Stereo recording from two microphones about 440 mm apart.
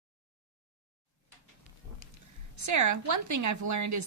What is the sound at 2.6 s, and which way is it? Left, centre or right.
A woman's voice, right.